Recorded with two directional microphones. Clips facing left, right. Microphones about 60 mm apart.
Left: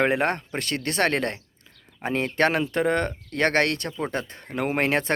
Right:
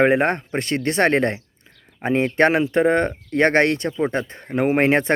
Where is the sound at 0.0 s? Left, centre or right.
Right.